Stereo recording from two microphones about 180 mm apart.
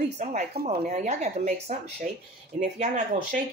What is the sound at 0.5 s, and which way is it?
Speech, 55° right (ahead or behind).